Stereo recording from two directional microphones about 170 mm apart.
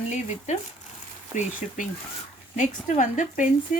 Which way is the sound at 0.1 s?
45° left (ahead or behind).